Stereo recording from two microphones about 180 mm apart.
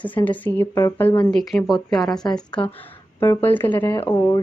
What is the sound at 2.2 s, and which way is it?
Speech, 25° left (ahead or behind).